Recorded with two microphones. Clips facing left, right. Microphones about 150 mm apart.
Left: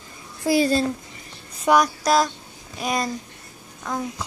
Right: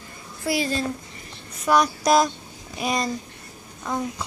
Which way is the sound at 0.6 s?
35° left (ahead or behind).